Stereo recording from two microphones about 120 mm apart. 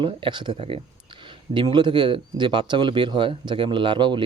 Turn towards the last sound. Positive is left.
turn(degrees=-40)  # may be behind; listen again after turning